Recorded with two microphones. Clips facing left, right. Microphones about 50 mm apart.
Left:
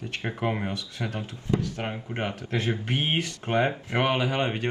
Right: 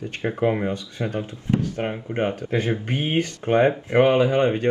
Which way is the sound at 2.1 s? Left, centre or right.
Right.